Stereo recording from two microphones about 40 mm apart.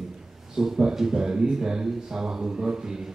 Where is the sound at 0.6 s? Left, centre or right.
Centre.